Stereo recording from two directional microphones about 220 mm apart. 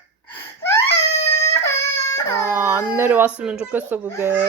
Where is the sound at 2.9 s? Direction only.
10° right (ahead or behind).